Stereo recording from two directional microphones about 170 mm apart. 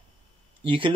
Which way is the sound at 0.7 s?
30° right (ahead or behind).